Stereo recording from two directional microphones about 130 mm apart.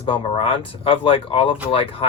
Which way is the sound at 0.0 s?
40° left (ahead or behind).